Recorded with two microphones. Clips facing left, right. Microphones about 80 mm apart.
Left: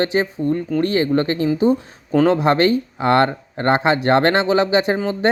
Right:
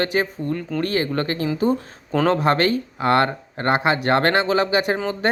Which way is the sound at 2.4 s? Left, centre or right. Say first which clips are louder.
Left 3 dB; left.